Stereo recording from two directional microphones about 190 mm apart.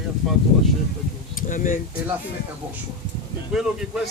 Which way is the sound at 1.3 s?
45° left (ahead or behind).